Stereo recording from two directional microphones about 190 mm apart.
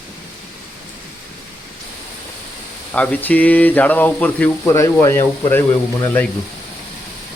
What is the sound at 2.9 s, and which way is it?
Speech, 5° left (ahead or behind).